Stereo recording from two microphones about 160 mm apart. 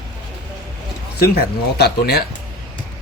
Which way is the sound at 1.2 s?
80° left.